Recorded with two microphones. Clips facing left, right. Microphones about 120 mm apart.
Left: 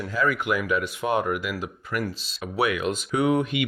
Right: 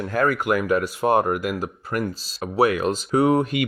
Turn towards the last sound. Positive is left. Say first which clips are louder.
# right 4 dB
turn(degrees=-40)  # may be behind; listen again after turning